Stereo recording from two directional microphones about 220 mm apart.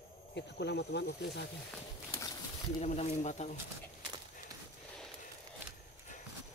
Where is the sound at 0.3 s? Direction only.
50° left (ahead or behind).